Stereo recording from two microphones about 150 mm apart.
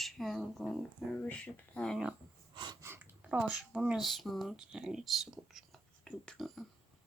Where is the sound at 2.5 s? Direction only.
30° right (ahead or behind).